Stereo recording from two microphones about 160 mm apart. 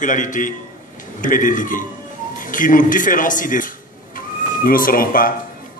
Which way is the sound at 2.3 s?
55° left (ahead or behind).